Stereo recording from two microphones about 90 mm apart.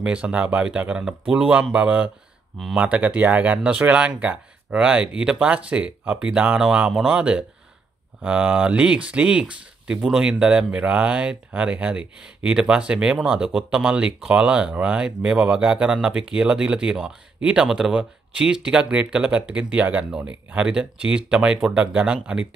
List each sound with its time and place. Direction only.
0.0 s speech: 15° right (ahead or behind)